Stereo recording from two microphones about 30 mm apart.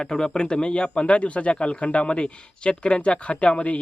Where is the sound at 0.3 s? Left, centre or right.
Left.